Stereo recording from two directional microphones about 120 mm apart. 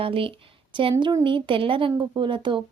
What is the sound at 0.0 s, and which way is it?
Speech, 50° right (ahead or behind).